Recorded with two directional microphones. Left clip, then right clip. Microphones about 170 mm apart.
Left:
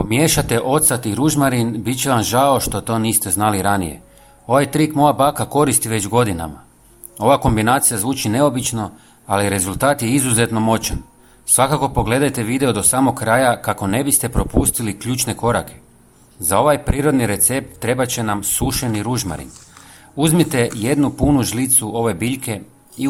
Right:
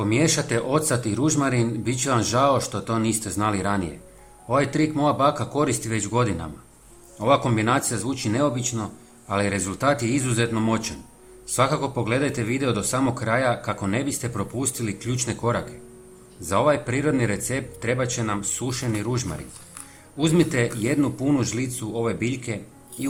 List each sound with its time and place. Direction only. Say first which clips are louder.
0.1 s a man's voice: left 6 dB; 40° left (ahead or behind)